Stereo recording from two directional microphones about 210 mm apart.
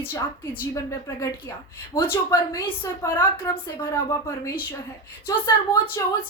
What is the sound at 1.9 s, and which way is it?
A woman's voice, 10° left (ahead or behind).